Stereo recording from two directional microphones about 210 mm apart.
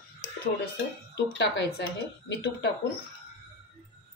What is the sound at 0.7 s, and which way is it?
Speech, 55° left (ahead or behind).